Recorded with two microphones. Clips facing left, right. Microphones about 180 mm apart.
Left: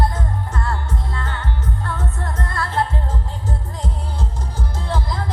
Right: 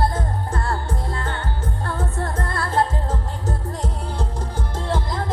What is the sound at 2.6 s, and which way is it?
Music, 45° right (ahead or behind).